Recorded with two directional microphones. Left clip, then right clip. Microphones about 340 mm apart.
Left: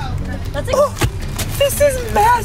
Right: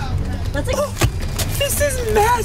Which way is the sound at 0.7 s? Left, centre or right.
Centre.